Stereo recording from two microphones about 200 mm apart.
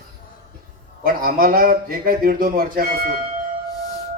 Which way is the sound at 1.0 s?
45° right (ahead or behind).